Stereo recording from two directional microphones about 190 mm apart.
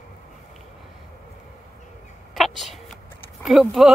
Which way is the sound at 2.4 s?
Centre (ahead or behind).